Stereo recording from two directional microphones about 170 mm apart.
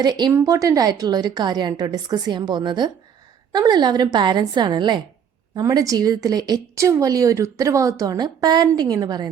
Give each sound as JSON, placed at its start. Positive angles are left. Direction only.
{"t": 0.0, "sound": "a woman's voice", "side_deg": -25}